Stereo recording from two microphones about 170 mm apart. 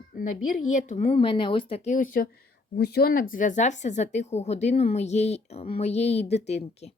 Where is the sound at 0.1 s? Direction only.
50° left (ahead or behind).